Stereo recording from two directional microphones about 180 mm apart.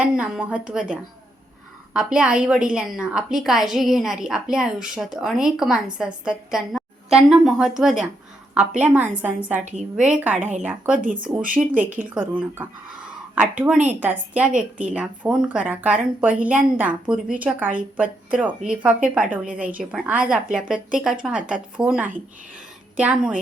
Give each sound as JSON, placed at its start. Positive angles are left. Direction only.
{"t": 0.0, "sound": "a woman's voice", "side_deg": -5}
{"t": 11.0, "sound": "speech", "side_deg": -50}
{"t": 11.6, "sound": "a woman's voice", "side_deg": -15}
{"t": 14.5, "sound": "speech", "side_deg": -45}
{"t": 14.9, "sound": "a woman's voice", "side_deg": -5}